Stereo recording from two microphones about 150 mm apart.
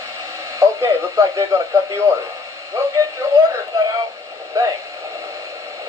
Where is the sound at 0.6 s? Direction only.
20° right (ahead or behind).